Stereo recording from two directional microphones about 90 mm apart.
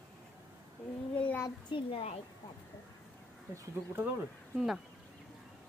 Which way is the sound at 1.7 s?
70° left (ahead or behind).